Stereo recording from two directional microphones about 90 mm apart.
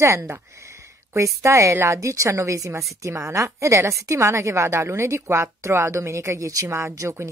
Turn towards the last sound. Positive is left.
turn(degrees=-30)  # may be behind; listen again after turning